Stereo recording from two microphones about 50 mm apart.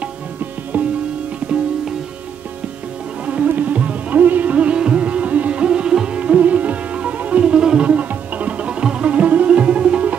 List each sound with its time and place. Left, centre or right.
0.7 s sitar: right
3.4 s music: right